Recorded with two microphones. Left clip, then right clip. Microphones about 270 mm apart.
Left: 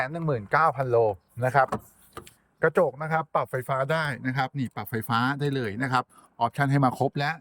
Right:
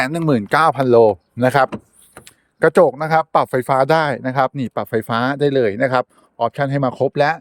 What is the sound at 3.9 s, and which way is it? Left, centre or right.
Speech, centre.